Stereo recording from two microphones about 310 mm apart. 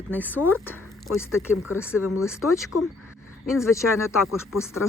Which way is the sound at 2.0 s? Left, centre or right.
Left.